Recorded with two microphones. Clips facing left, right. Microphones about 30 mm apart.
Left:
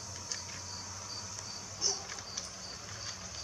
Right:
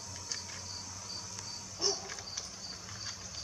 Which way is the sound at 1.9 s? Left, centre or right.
Centre.